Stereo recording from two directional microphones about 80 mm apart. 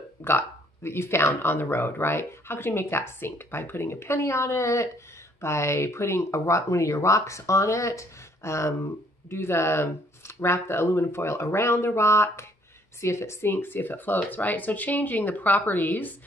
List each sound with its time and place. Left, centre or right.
0.2 s speech: left